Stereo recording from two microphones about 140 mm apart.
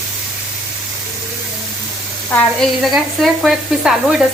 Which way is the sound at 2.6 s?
5° left (ahead or behind).